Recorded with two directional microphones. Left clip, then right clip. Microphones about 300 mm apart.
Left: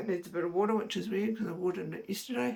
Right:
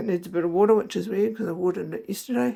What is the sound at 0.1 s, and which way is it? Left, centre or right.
Speech, right.